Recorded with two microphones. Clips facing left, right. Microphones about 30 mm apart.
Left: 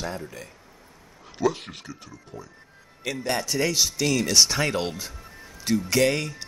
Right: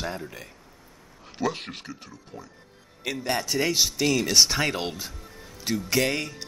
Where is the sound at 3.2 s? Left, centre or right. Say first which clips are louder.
Even; centre.